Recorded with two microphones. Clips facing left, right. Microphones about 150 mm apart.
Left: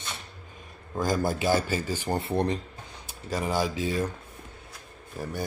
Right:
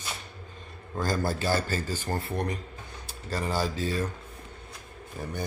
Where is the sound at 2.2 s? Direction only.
25° left (ahead or behind).